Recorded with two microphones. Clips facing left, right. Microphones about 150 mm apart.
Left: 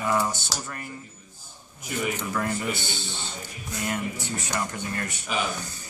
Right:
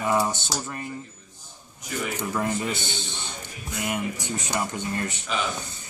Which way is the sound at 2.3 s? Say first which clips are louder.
Right 1 dB; 20° right (ahead or behind).